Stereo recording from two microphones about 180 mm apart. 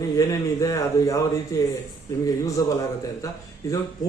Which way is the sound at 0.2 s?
20° left (ahead or behind).